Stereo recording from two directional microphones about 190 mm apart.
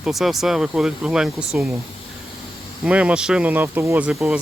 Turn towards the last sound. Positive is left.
turn(degrees=-5)  # may be behind; listen again after turning